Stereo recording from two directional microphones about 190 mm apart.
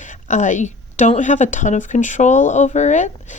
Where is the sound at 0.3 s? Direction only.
40° left (ahead or behind).